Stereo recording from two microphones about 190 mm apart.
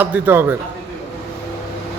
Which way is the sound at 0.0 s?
10° right (ahead or behind).